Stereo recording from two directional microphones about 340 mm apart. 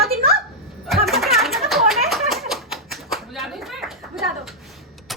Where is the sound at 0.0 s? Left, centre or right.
Right.